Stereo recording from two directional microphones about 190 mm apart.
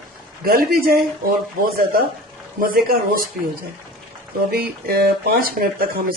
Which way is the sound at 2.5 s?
50° right (ahead or behind).